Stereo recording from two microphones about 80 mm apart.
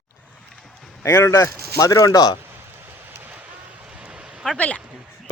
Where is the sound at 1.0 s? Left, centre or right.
Left.